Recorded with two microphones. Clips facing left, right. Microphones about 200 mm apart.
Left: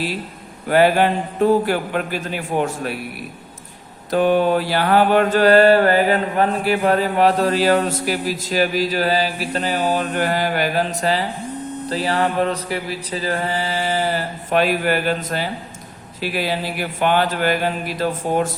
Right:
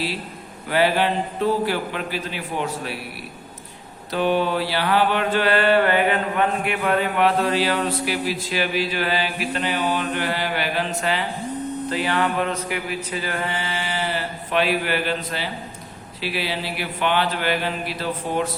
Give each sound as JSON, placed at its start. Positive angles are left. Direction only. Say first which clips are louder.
{"t": 0.7, "sound": "speech", "louder": "left 5 dB", "side_deg": 45}
{"t": 4.1, "sound": "mantra", "louder": "left 5 dB", "side_deg": 45}
{"t": 16.2, "sound": "speech", "louder": "left 4 dB", "side_deg": 45}